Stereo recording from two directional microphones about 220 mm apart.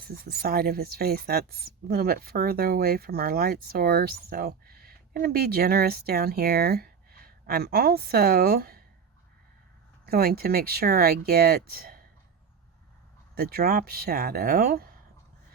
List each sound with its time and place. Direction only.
0.0 s speech: 45° right (ahead or behind)
10.1 s speech: 45° right (ahead or behind)
13.3 s speech: 45° right (ahead or behind)